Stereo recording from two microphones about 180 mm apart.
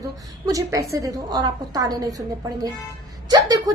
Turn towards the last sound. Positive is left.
turn(degrees=-20)  # may be behind; listen again after turning